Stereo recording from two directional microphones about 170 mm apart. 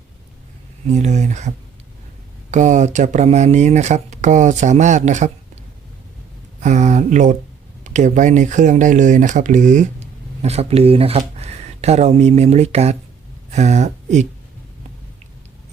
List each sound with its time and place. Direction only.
0.9 s speech: 45° right (ahead or behind)
6.6 s speech: 45° right (ahead or behind)